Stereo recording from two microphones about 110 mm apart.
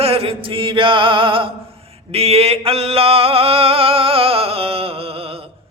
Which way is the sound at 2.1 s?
65° right (ahead or behind).